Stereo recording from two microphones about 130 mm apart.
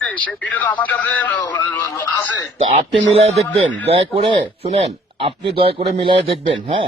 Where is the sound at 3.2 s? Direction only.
55° right (ahead or behind).